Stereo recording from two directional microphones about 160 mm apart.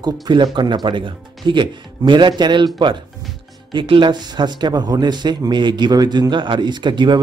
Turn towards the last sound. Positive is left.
turn(degrees=-30)  # may be behind; listen again after turning